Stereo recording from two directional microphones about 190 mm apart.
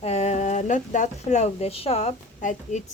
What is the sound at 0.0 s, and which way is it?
Speech, 35° left (ahead or behind).